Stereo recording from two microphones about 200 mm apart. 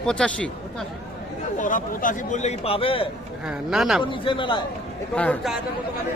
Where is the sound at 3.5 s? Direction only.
Centre (ahead or behind).